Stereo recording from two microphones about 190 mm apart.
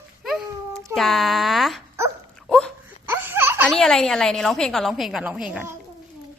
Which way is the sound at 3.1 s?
10° right (ahead or behind).